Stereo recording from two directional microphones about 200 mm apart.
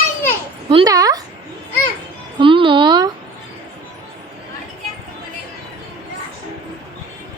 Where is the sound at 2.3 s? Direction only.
25° right (ahead or behind).